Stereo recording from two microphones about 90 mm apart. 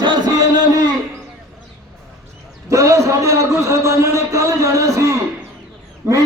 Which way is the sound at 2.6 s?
35° right (ahead or behind).